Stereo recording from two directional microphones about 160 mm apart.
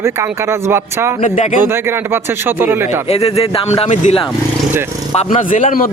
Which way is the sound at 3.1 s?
40° left (ahead or behind).